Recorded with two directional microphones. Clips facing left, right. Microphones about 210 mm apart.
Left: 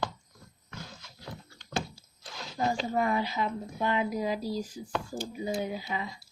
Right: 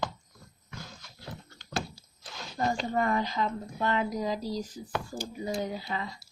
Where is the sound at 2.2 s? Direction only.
5° left (ahead or behind).